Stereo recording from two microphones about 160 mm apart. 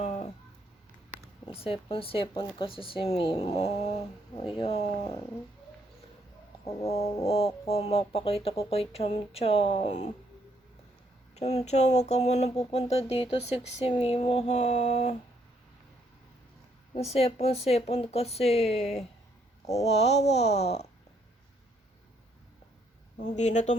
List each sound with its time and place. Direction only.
0.0 s a sound: 45° left (ahead or behind)
1.5 s speech: 35° left (ahead or behind)
6.8 s speech: 40° left (ahead or behind)
11.3 s speech: 45° left (ahead or behind)
16.9 s speech: 40° left (ahead or behind)
23.1 s speech: 50° left (ahead or behind)